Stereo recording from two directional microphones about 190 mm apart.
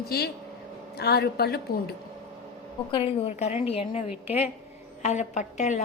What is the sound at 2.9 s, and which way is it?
A woman's voice, 25° left (ahead or behind).